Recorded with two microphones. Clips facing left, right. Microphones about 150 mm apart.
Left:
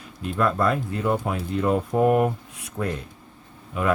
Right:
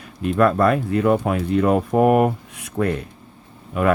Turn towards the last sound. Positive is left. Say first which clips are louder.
# right 5 dB
turn(degrees=-60)  # may be behind; listen again after turning